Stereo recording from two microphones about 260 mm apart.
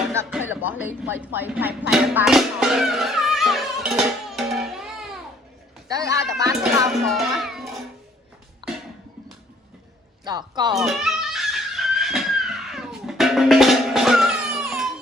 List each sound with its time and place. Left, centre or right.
0.1 s music: centre
1.2 s speech: centre
5.9 s speech: centre
6.9 s a child's voice: centre
8.6 s a sound: centre
10.2 s speech: centre
10.7 s a sound: centre